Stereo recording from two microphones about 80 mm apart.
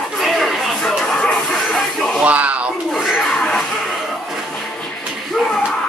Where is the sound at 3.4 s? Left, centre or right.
Centre.